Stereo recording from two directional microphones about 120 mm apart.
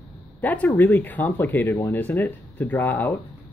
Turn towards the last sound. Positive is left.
turn(degrees=20)  # may be behind; listen again after turning